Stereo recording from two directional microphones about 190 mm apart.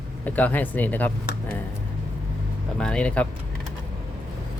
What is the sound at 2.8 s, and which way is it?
Speech, 5° left (ahead or behind).